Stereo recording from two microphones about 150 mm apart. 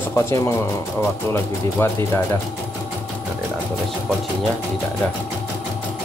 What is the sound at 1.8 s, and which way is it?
Speech, 15° left (ahead or behind).